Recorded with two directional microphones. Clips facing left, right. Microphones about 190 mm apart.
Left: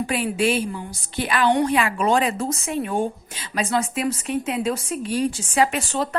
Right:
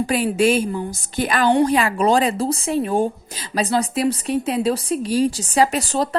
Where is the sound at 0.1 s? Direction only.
40° right (ahead or behind).